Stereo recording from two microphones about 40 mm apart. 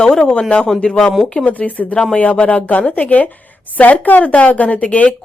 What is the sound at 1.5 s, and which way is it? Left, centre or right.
A woman's voice, left.